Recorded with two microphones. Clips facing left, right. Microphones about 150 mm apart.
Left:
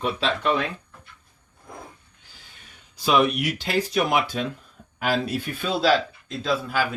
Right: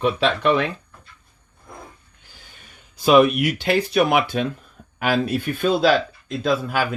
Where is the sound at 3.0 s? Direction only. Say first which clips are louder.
Right 6 dB; 50° right (ahead or behind).